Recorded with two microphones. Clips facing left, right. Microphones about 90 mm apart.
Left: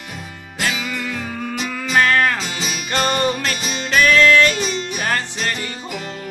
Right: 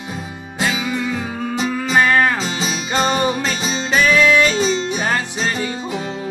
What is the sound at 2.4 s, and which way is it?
Music, 30° right (ahead or behind).